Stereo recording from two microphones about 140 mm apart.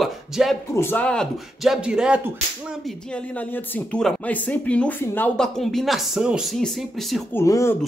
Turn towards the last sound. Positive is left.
turn(degrees=20)  # may be behind; listen again after turning